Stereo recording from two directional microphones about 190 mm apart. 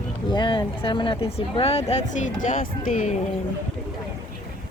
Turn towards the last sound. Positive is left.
turn(degrees=45)  # may be behind; listen again after turning